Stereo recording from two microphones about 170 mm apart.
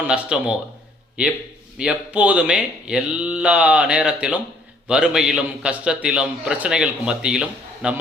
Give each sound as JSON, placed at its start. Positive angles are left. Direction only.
{"t": 0.0, "sound": "a man's voice", "side_deg": -5}
{"t": 1.8, "sound": "a man's voice", "side_deg": -5}